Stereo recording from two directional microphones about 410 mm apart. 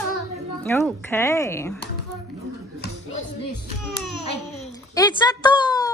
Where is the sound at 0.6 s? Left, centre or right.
Centre.